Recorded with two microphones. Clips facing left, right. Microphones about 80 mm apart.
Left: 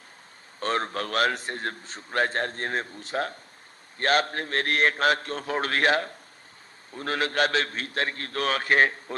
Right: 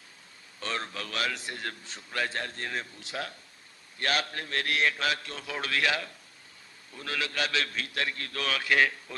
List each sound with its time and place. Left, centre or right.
0.6 s a man's voice: left